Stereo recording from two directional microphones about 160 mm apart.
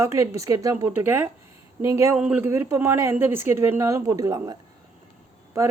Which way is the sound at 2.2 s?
10° right (ahead or behind).